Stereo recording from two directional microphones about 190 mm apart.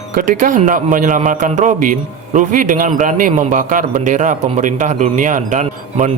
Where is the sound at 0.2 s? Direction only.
45° right (ahead or behind).